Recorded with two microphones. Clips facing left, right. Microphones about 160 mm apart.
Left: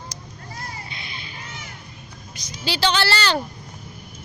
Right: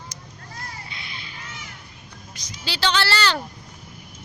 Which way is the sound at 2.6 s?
15° left (ahead or behind).